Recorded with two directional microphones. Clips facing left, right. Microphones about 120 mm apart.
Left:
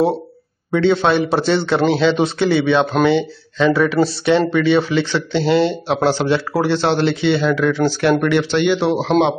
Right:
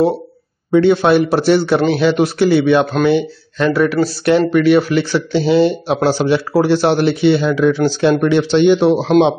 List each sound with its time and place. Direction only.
0.7 s speech: 10° right (ahead or behind)